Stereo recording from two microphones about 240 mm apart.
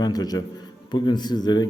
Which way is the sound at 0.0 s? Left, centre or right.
Centre.